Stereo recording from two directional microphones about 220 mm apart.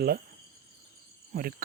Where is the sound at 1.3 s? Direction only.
40° right (ahead or behind).